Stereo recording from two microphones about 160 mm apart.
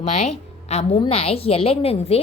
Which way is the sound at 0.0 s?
45° left (ahead or behind).